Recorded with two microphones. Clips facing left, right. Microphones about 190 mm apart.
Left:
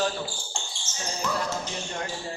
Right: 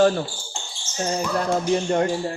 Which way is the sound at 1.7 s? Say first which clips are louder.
Right 14 dB; 60° right (ahead or behind).